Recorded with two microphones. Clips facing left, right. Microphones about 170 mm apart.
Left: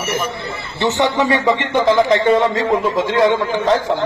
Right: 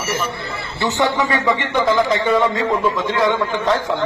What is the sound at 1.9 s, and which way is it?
Speech, 25° left (ahead or behind).